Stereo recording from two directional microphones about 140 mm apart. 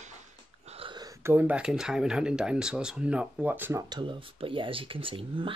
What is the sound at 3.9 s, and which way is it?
Speech, 35° right (ahead or behind).